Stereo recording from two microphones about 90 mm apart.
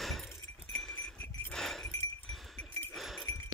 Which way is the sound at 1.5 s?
5° left (ahead or behind).